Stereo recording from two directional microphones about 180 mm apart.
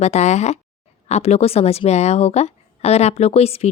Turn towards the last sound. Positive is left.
turn(degrees=35)  # may be behind; listen again after turning